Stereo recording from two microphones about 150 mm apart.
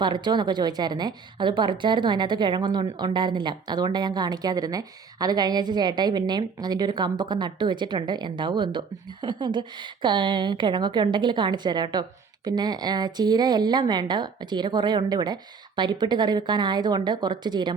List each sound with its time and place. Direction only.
0.0 s a woman's voice: 30° right (ahead or behind)